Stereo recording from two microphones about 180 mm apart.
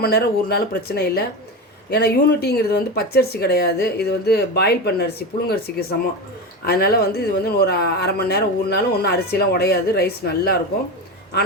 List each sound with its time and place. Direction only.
0.0 s speech: 60° left (ahead or behind)